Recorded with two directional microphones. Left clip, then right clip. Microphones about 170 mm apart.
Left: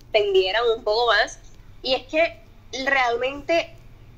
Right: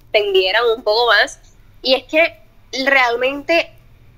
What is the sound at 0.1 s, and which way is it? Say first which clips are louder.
A woman's voice: right 5 dB; 35° right (ahead or behind).